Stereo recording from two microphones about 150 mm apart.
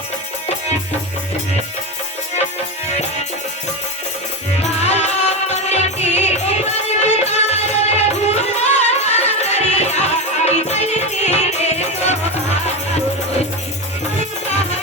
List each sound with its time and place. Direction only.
4.6 s music: 45° left (ahead or behind)